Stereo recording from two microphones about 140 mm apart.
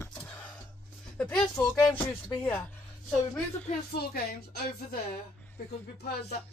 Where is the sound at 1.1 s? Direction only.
10° left (ahead or behind).